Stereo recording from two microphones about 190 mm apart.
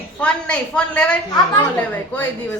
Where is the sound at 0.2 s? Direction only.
5° left (ahead or behind).